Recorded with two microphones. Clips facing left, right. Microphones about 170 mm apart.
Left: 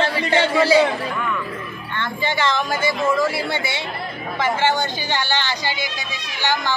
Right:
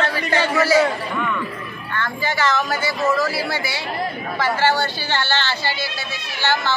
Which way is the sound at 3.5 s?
25° left (ahead or behind).